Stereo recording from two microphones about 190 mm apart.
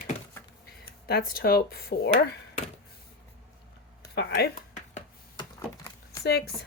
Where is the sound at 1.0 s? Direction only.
55° left (ahead or behind).